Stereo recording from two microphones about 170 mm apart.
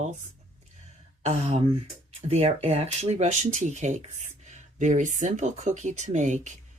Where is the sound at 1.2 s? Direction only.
35° right (ahead or behind).